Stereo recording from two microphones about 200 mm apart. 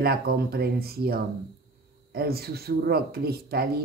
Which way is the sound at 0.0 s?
50° right (ahead or behind).